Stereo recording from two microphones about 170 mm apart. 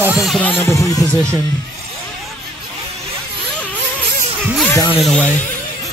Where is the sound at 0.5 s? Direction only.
15° left (ahead or behind).